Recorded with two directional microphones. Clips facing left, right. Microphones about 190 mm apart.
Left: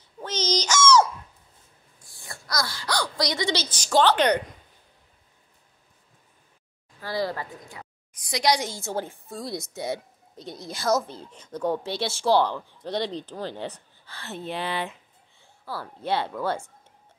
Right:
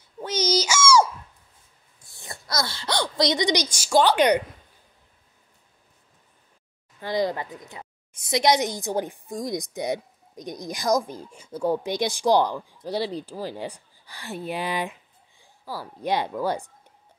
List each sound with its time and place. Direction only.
0.2 s a sound: 10° right (ahead or behind)
2.1 s speech: 25° right (ahead or behind)
7.0 s a woman's voice: 20° right (ahead or behind)